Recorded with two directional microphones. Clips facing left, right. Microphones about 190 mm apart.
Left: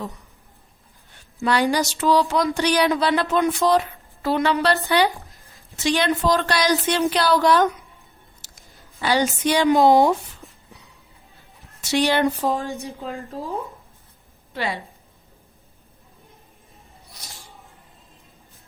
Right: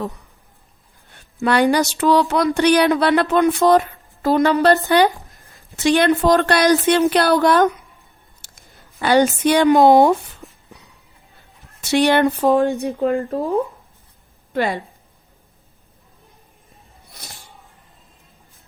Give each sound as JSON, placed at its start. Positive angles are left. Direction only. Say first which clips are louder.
{"t": 1.1, "sound": "a sound", "louder": "right 4 dB", "side_deg": -55}
{"t": 2.0, "sound": "speech", "louder": "right 1 dB", "side_deg": -60}
{"t": 5.7, "sound": "a woman's voice", "louder": "right 6 dB", "side_deg": -55}
{"t": 11.8, "sound": "speech", "louder": "right 4 dB", "side_deg": -55}
{"t": 14.5, "sound": "a woman's voice", "louder": "right 7 dB", "side_deg": -50}